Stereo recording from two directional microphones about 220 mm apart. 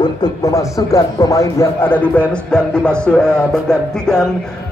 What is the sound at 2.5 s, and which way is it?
Music, 5° left (ahead or behind).